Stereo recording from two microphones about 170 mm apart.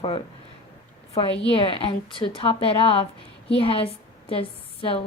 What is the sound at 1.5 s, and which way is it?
A woman's voice, 30° left (ahead or behind).